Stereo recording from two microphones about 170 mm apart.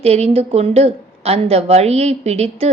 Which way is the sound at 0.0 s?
40° right (ahead or behind).